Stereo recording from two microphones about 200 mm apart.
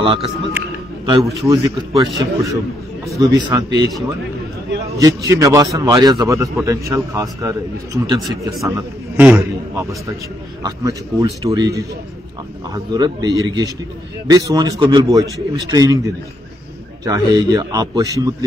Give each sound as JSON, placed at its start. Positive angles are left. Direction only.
{"t": 0.0, "sound": "a man's voice", "side_deg": -25}
{"t": 4.9, "sound": "a man's voice", "side_deg": -15}
{"t": 17.0, "sound": "a man's voice", "side_deg": -20}